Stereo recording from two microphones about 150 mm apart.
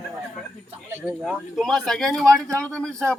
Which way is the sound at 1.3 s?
Centre (ahead or behind).